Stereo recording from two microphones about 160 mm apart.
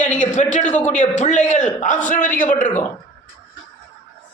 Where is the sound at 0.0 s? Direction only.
50° left (ahead or behind).